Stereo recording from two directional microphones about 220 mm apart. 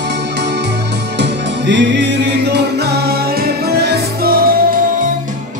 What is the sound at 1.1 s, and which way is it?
Music, 50° right (ahead or behind).